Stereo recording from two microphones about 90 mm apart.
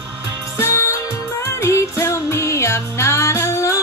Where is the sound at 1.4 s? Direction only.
35° left (ahead or behind).